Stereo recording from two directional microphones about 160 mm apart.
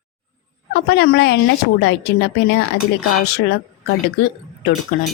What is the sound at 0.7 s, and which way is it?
A woman's voice, 90° left.